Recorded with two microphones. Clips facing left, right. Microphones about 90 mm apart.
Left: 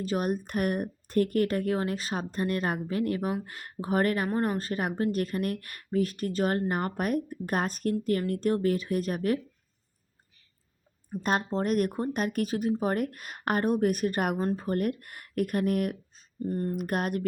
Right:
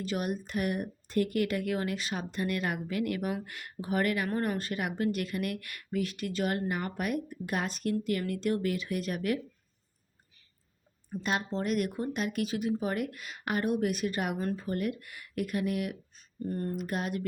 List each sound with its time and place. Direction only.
0.0 s speech: 40° left (ahead or behind)
4.3 s speech: 30° left (ahead or behind)
11.2 s speech: 45° left (ahead or behind)
14.3 s speech: 35° left (ahead or behind)
14.6 s speech: 50° left (ahead or behind)
16.1 s a sound: 25° left (ahead or behind)
16.7 s speech: 55° left (ahead or behind)